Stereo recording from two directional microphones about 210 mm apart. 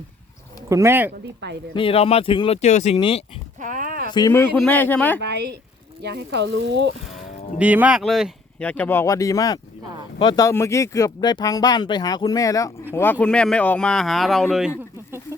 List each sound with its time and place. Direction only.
0.7 s speech: 15° right (ahead or behind)
1.7 s speech: 25° left (ahead or behind)
3.6 s a sound: 40° right (ahead or behind)
4.1 s speech: 15° left (ahead or behind)
6.0 s speech: 55° right (ahead or behind)
7.6 s speech: 5° right (ahead or behind)